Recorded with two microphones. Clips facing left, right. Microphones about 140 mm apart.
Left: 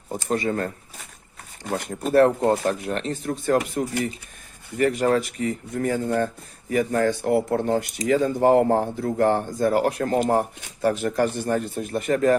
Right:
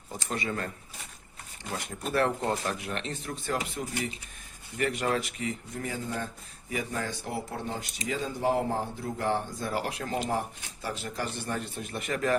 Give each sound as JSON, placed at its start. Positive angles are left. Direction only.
{"t": 0.1, "sound": "speech", "side_deg": 45}